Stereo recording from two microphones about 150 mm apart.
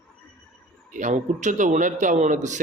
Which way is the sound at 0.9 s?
55° right (ahead or behind).